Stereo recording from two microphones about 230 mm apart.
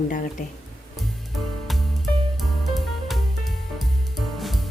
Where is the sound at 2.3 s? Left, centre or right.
Centre.